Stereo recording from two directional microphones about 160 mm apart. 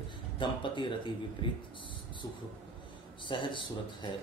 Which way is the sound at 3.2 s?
30° left (ahead or behind).